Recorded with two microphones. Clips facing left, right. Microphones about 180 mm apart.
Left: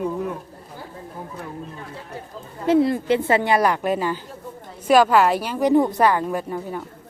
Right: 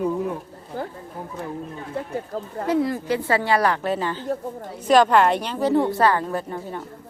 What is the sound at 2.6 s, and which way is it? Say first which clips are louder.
A woman's voice: left 5 dB; 25° left (ahead or behind).